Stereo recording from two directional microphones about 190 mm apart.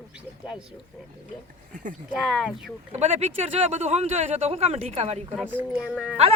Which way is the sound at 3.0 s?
35° right (ahead or behind).